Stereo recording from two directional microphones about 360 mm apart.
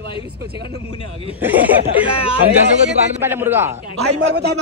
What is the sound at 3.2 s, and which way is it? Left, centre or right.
Speech, centre.